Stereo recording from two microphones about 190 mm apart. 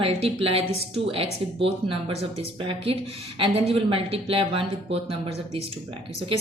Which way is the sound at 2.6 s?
25° right (ahead or behind).